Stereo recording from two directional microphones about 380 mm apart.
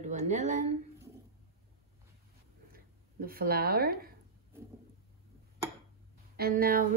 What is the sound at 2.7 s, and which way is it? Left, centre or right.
Speech, right.